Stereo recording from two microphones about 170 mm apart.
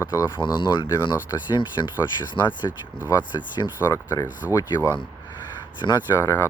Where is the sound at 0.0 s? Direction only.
20° left (ahead or behind).